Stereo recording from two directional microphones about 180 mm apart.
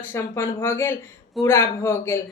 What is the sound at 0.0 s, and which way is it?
Speech, 10° left (ahead or behind).